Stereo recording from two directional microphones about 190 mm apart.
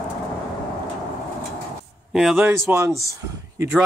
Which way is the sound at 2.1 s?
5° right (ahead or behind).